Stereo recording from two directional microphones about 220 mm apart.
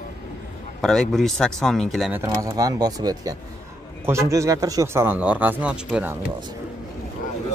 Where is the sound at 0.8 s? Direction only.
Centre (ahead or behind).